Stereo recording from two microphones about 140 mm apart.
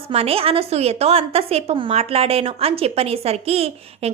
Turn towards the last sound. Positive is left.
turn(degrees=-45)  # may be behind; listen again after turning